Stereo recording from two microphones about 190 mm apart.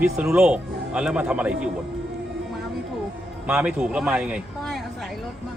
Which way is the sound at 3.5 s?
5° right (ahead or behind).